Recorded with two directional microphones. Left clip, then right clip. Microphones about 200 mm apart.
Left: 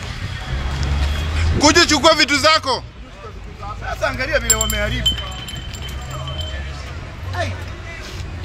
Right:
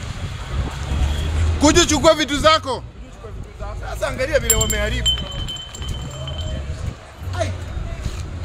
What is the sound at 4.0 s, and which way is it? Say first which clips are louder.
Speech: even; 60° right (ahead or behind).